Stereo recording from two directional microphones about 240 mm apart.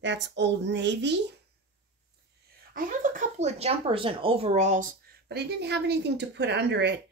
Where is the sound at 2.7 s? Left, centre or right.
Right.